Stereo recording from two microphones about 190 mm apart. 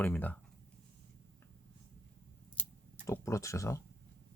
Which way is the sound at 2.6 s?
10° left (ahead or behind).